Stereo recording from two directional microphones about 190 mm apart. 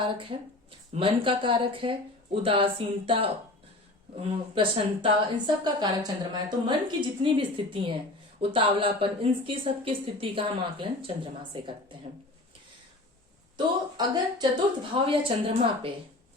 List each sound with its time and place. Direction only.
0.0 s a woman's voice: 25° right (ahead or behind)
13.9 s a woman's voice: 20° right (ahead or behind)